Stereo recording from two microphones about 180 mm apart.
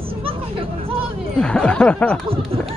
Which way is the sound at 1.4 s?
5° left (ahead or behind).